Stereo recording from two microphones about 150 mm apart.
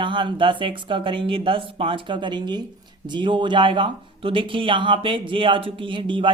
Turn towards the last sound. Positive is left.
turn(degrees=-35)  # may be behind; listen again after turning